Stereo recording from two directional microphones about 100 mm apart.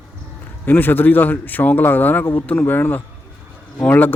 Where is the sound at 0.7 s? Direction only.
20° left (ahead or behind).